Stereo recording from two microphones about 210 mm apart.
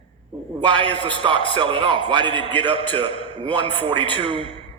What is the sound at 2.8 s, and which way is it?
A man's voice, 25° left (ahead or behind).